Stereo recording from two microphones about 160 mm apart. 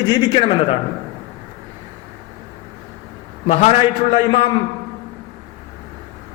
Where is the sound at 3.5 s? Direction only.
45° left (ahead or behind).